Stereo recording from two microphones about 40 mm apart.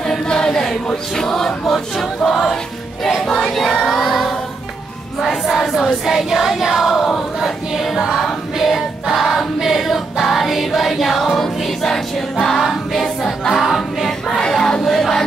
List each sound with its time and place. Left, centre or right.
0.0 s choir: centre
2.2 s music: centre
3.3 s choir: centre
5.2 s music: centre
5.8 s choir: centre
7.3 s music: centre
8.5 s choir: centre
10.2 s music: centre
13.0 s choir: centre
13.5 s music: centre